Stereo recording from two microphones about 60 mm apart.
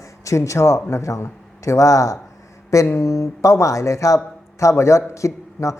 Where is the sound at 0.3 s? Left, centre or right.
Left.